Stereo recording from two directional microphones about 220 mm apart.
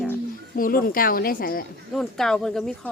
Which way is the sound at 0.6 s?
40° left (ahead or behind).